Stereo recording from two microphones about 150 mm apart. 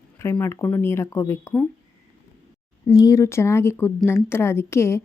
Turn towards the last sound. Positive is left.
turn(degrees=15)  # may be behind; listen again after turning